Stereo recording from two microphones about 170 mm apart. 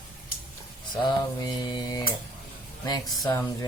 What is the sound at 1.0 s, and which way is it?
Mantra, 25° left (ahead or behind).